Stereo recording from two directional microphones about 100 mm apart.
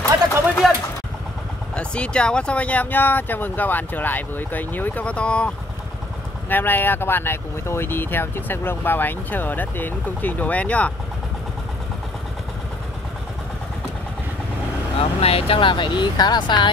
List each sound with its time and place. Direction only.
0.6 s a sound: centre (ahead or behind)
1.8 s speech: 10° left (ahead or behind)
6.5 s speech: 20° left (ahead or behind)
15.0 s speech: 85° left; by 16.7 s 50° left (ahead or behind)